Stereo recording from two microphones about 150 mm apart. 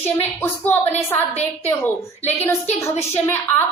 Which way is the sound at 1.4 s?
10° left (ahead or behind).